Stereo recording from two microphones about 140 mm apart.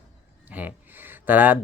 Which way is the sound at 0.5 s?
10° right (ahead or behind).